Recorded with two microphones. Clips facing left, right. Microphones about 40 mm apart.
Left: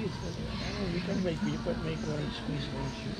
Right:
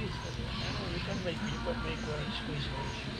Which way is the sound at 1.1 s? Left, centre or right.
Right.